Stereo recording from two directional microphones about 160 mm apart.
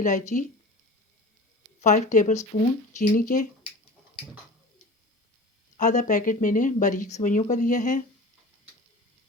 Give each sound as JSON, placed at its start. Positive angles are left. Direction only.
{"t": 0.0, "sound": "speech", "side_deg": 50}
{"t": 1.8, "sound": "speech", "side_deg": 50}
{"t": 5.7, "sound": "speech", "side_deg": 50}